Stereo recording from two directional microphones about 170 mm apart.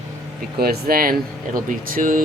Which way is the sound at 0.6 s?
60° right (ahead or behind).